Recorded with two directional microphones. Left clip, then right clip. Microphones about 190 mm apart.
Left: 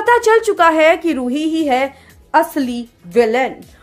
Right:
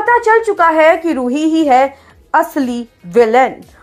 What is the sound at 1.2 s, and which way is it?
A woman's voice, 5° right (ahead or behind).